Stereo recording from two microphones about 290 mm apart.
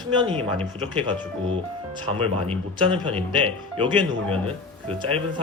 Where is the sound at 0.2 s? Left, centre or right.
Centre.